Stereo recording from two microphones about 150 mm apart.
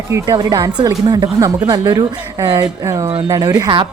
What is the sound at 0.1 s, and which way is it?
A woman's voice, 20° right (ahead or behind).